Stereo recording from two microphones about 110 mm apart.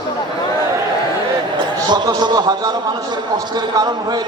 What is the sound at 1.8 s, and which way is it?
A man's voice, 40° right (ahead or behind).